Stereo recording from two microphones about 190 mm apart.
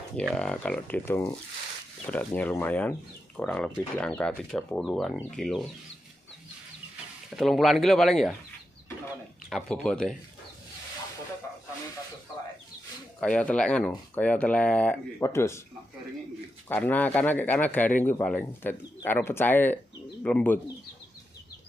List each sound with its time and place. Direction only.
0.1 s speech: 5° left (ahead or behind)
7.2 s speech: centre (ahead or behind)
9.5 s speech: centre (ahead or behind)
13.2 s speech: 5° left (ahead or behind)
16.6 s speech: 10° left (ahead or behind)